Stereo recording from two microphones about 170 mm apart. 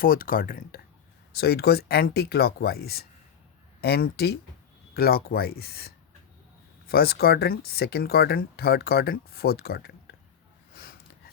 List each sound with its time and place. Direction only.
0.0 s speech: 55° left (ahead or behind)
1.3 s speech: 70° left (ahead or behind)